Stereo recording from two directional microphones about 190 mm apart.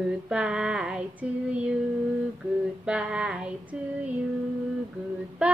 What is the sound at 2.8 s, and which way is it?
Child singing, 5° right (ahead or behind).